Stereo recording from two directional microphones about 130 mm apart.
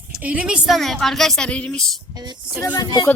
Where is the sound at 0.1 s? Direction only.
10° right (ahead or behind).